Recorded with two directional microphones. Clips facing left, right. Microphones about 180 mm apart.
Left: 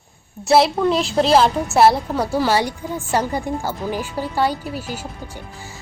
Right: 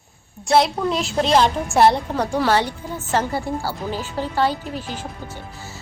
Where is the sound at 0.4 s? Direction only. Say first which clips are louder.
Left 3 dB; centre (ahead or behind).